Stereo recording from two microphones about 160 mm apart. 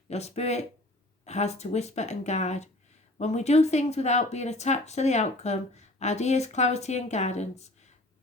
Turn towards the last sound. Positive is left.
turn(degrees=45)  # may be behind; listen again after turning